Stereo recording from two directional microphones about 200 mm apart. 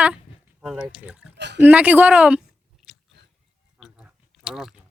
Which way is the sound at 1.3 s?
60° right (ahead or behind).